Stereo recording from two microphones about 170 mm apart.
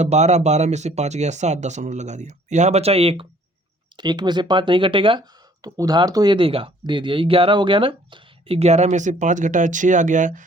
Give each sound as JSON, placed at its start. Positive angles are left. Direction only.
{"t": 0.0, "sound": "speech", "side_deg": -40}